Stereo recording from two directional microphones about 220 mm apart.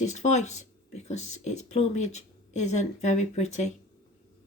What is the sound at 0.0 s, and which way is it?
Speech, 30° left (ahead or behind).